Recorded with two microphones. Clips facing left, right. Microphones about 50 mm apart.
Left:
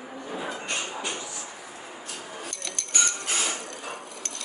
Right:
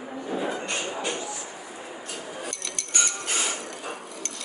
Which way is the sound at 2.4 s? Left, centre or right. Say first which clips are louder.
Right 2 dB; centre.